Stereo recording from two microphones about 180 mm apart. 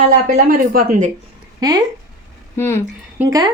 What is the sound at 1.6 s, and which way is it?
Speech, 20° right (ahead or behind).